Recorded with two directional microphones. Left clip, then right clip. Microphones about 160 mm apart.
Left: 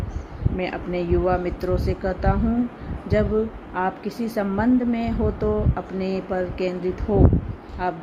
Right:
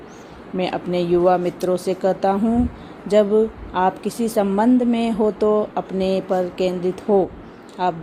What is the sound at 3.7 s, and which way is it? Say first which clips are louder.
A woman's voice: right 5 dB; 35° right (ahead or behind).